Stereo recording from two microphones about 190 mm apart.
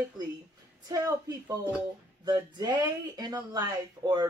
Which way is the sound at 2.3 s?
20° right (ahead or behind).